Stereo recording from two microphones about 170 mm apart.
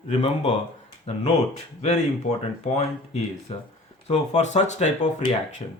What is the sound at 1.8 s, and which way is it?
Speech, 40° left (ahead or behind).